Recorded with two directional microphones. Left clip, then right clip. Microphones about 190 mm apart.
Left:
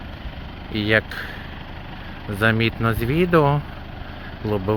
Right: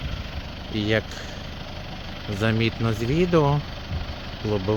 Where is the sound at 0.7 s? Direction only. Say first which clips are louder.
Left 5 dB; 5° right (ahead or behind).